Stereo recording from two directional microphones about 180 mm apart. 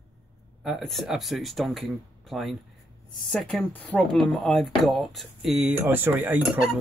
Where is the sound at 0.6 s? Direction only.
Centre (ahead or behind).